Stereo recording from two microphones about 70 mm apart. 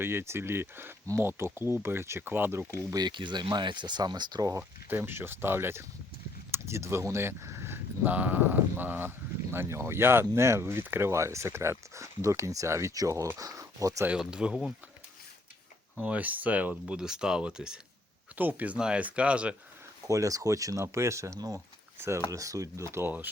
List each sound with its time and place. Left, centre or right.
0.0 s speech: right
2.9 s speech: right
4.9 s speech: right
14.2 s speech: centre
16.0 s speech: right
18.3 s speech: right
20.1 s speech: right
21.3 s speech: right
22.9 s speech: right